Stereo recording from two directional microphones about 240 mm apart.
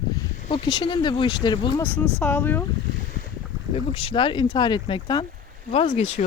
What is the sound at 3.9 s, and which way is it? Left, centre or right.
Speech, left.